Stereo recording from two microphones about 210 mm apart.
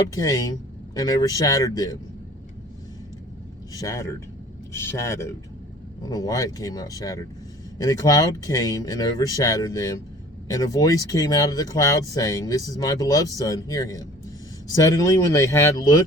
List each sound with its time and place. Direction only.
0.1 s speech: 20° left (ahead or behind)
3.8 s speech: 15° left (ahead or behind)